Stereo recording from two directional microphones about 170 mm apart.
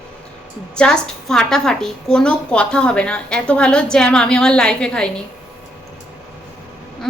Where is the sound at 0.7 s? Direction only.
5° left (ahead or behind).